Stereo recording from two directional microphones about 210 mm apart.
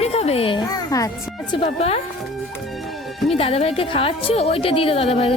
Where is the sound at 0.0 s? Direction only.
30° left (ahead or behind).